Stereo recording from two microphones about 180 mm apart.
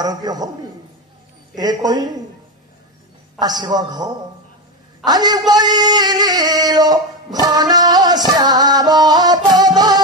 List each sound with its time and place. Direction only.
0.0 s a man's voice: 20° right (ahead or behind)
1.5 s a man's voice: 20° right (ahead or behind)
3.3 s a man's voice: 20° right (ahead or behind)
5.5 s singing: 20° right (ahead or behind)